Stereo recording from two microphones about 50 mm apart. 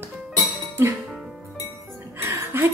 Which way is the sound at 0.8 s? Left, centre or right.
Right.